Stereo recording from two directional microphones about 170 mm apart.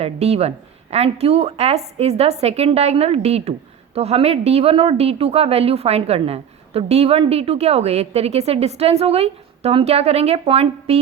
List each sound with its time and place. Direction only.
0.0 s a woman's voice: 40° right (ahead or behind)